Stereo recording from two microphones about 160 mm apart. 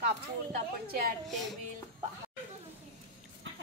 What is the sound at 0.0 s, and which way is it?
A woman's voice, 70° right (ahead or behind).